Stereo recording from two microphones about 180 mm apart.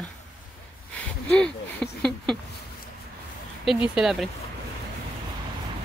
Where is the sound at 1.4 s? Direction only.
5° left (ahead or behind).